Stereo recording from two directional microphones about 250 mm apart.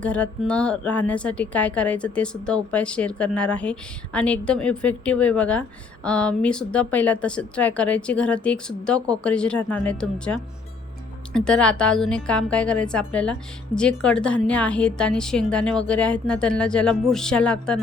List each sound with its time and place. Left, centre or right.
0.0 s speech: centre
11.3 s speech: centre